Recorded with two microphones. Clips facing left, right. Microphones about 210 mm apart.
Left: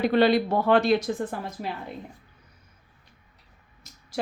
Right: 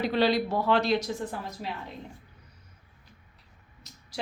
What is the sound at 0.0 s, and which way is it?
A woman's voice, 55° left (ahead or behind).